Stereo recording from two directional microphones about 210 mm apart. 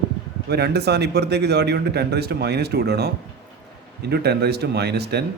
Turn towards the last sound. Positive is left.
turn(degrees=-50)  # may be behind; listen again after turning